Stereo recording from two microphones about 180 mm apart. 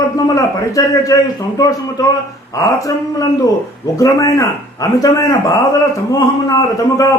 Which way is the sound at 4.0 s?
20° left (ahead or behind).